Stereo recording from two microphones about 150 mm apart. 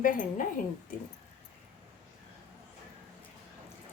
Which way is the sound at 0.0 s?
60° left (ahead or behind).